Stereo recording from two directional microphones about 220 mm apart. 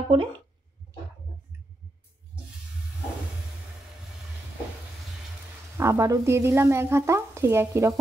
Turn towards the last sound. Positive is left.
turn(degrees=-10)  # may be behind; listen again after turning